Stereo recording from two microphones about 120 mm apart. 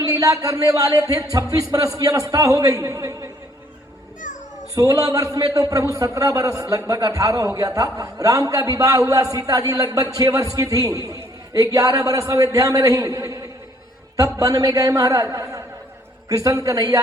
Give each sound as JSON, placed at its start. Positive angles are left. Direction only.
{"t": 0.1, "sound": "a man's voice", "side_deg": -30}
{"t": 4.7, "sound": "a man's voice", "side_deg": -30}